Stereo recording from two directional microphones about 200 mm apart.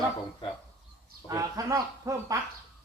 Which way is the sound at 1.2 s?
15° right (ahead or behind).